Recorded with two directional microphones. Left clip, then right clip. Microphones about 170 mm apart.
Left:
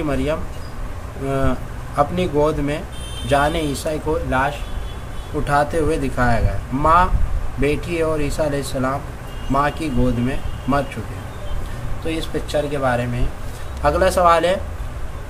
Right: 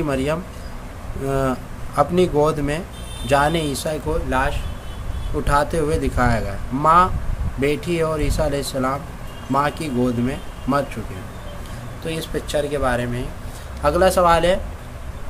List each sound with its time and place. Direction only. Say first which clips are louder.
0.1 s a man's voice: even; 30° right (ahead or behind)
12.1 s speech: left 1 dB; 30° right (ahead or behind)
13.8 s a man's voice: left 1 dB; 20° right (ahead or behind)